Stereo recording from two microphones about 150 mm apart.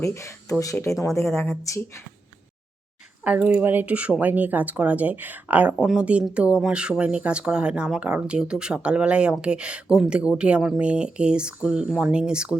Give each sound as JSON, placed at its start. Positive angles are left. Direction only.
{"t": 0.0, "sound": "speech", "side_deg": 20}
{"t": 3.2, "sound": "speech", "side_deg": -10}